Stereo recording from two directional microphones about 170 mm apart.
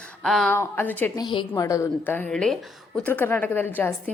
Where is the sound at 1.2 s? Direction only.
25° left (ahead or behind).